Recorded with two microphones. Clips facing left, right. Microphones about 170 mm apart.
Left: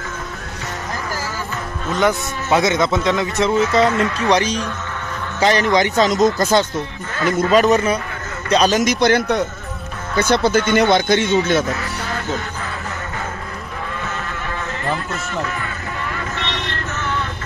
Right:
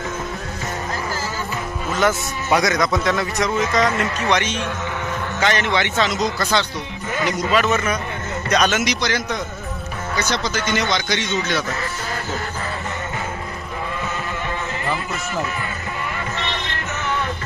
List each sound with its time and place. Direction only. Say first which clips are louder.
2.0 s a man's voice: left 2 dB; 20° left (ahead or behind)
8.8 s speech: left 7 dB; 55° left (ahead or behind)